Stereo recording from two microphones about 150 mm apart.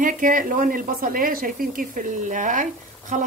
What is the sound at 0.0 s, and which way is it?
Speech, 65° right (ahead or behind).